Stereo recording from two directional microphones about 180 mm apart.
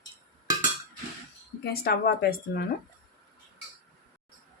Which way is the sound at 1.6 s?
55° left (ahead or behind).